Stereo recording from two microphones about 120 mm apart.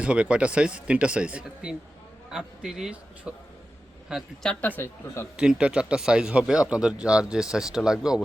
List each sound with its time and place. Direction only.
0.0 s a man's voice: 10° right (ahead or behind)
4.6 s speech: 15° left (ahead or behind)
5.4 s speech: 5° right (ahead or behind)